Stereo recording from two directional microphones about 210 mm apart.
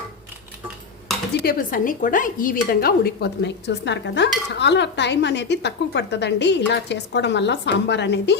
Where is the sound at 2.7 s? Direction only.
45° left (ahead or behind).